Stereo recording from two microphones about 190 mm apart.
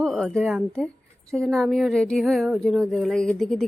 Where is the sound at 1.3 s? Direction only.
5° left (ahead or behind).